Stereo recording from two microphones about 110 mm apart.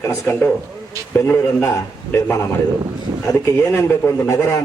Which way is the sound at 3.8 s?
25° left (ahead or behind).